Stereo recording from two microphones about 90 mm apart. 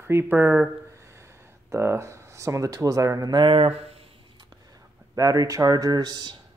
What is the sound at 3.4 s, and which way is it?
Speech, 85° right.